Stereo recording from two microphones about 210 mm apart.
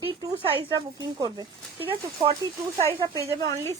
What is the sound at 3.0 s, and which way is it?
Speech, 15° right (ahead or behind).